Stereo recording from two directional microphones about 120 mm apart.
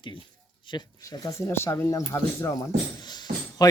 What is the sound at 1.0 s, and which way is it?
Speech, 30° left (ahead or behind).